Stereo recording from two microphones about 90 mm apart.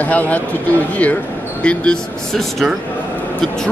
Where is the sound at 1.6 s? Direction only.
10° left (ahead or behind).